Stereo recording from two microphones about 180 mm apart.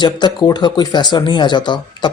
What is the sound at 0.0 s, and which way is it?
Speech, 25° left (ahead or behind).